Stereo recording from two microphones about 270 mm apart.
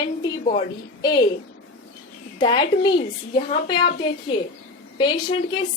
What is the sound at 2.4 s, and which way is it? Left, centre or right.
Speech, centre.